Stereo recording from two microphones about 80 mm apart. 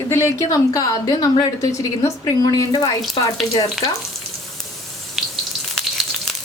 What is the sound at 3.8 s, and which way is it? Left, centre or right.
Frying, centre.